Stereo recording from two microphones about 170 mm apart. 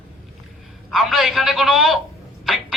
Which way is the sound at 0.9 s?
Centre (ahead or behind).